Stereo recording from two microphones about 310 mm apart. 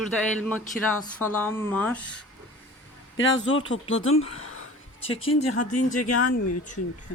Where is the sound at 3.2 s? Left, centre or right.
Left.